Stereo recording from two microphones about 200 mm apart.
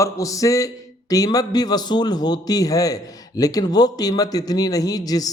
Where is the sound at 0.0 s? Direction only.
15° left (ahead or behind).